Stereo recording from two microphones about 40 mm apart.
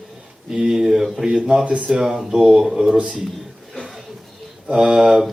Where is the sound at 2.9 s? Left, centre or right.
Right.